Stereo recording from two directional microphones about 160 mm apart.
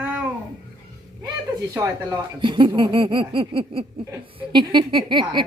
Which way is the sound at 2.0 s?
30° right (ahead or behind).